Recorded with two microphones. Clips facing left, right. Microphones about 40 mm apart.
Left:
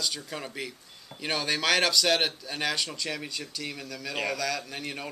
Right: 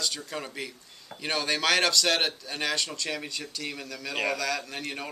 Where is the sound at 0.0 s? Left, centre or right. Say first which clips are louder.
Right 1 dB; centre.